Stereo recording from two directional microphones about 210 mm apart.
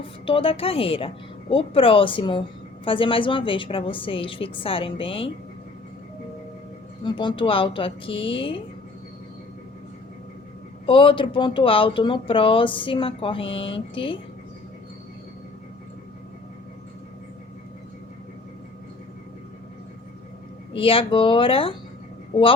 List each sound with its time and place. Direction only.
0.0 s speech: 25° left (ahead or behind)
7.0 s speech: 20° left (ahead or behind)
10.8 s speech: 25° left (ahead or behind)
20.7 s speech: 25° left (ahead or behind)